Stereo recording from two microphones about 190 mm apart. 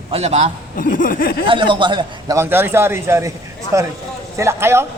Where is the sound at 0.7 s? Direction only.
45° left (ahead or behind).